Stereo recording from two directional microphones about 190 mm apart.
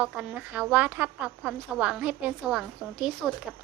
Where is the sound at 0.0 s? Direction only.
5° right (ahead or behind).